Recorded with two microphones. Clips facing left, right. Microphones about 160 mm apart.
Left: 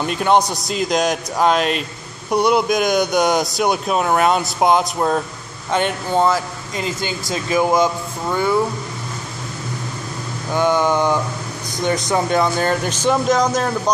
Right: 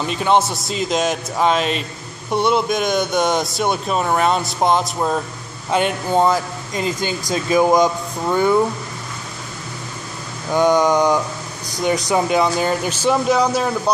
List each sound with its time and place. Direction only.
0.0 s a man's voice: centre (ahead or behind); by 8.5 s 15° right (ahead or behind)
10.5 s a man's voice: 15° right (ahead or behind)